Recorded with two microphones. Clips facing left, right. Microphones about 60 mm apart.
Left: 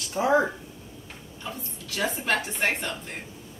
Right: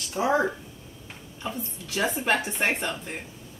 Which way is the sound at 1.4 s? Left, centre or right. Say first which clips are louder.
Right 4 dB; centre.